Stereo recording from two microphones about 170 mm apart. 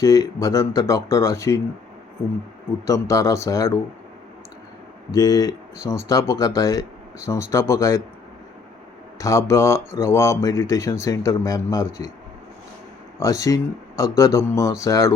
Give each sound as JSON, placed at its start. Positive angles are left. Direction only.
{"t": 0.0, "sound": "speech", "side_deg": 20}
{"t": 2.8, "sound": "speech", "side_deg": 20}
{"t": 5.1, "sound": "speech", "side_deg": 20}
{"t": 9.1, "sound": "speech", "side_deg": 20}
{"t": 13.1, "sound": "speech", "side_deg": 20}